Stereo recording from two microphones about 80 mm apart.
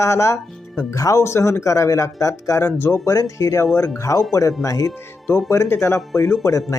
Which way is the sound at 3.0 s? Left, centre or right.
Left.